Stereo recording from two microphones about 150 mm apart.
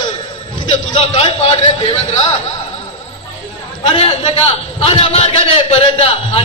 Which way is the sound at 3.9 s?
40° left (ahead or behind).